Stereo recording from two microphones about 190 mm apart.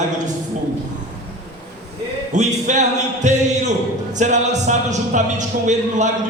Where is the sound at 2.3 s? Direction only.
40° right (ahead or behind).